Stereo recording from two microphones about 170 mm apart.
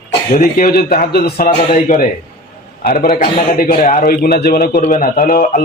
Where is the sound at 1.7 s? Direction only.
50° left (ahead or behind).